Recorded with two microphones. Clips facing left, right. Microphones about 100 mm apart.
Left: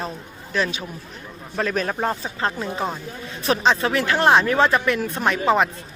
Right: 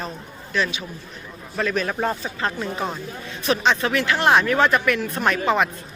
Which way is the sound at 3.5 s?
30° left (ahead or behind).